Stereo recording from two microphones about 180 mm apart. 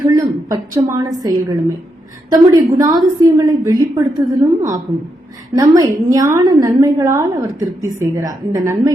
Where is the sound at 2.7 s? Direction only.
20° right (ahead or behind).